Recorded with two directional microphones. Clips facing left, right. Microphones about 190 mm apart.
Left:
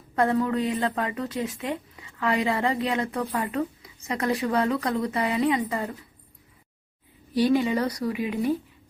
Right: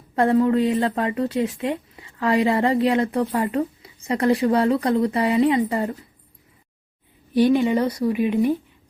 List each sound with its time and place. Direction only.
0.2 s speech: 30° right (ahead or behind)
7.5 s speech: 25° right (ahead or behind)